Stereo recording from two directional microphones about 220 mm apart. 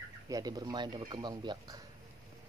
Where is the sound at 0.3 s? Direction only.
15° right (ahead or behind).